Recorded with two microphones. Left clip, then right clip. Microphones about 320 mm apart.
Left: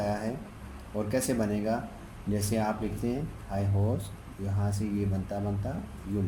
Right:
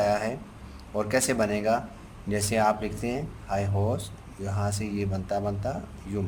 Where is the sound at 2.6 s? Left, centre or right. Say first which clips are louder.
Right 9 dB; right.